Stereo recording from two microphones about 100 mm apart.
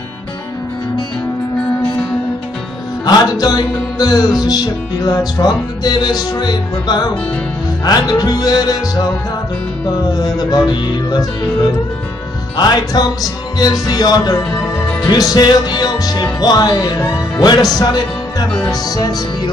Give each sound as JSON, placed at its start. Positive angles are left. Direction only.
{"t": 3.1, "sound": "music", "side_deg": 40}
{"t": 10.1, "sound": "music", "side_deg": 40}
{"t": 12.5, "sound": "music", "side_deg": 45}